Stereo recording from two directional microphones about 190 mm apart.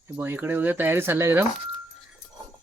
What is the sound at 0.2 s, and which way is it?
Speech, 10° right (ahead or behind).